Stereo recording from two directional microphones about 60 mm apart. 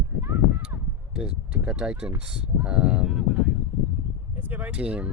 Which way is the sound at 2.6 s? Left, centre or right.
Centre.